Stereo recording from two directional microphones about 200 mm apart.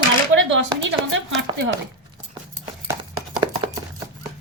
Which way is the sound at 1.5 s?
25° right (ahead or behind).